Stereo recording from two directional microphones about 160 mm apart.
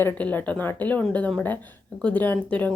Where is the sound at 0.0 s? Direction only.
10° left (ahead or behind).